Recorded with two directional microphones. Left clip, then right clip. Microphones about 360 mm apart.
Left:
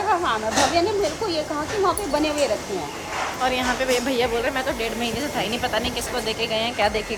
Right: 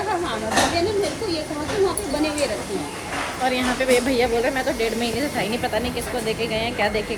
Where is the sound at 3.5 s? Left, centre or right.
Centre.